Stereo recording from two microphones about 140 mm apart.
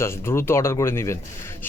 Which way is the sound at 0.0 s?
20° left (ahead or behind).